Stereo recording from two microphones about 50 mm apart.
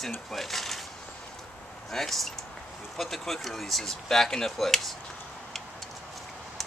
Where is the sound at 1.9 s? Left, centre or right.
Centre.